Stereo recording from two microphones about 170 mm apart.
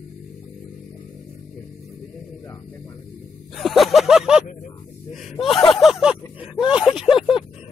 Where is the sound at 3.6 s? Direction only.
Centre (ahead or behind).